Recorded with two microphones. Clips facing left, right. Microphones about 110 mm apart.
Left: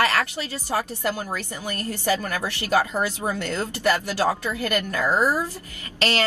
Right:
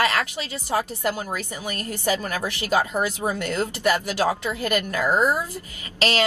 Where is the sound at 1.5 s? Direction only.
20° right (ahead or behind).